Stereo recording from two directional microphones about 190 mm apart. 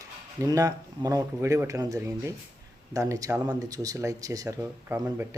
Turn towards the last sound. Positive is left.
turn(degrees=-15)  # may be behind; listen again after turning